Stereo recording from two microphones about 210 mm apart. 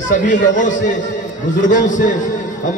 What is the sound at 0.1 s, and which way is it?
A man's voice, 35° left (ahead or behind).